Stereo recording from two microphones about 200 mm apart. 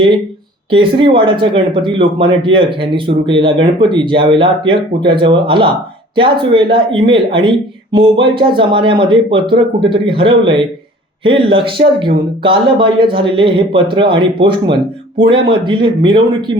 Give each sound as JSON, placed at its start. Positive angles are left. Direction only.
{"t": 0.7, "sound": "speech", "side_deg": -25}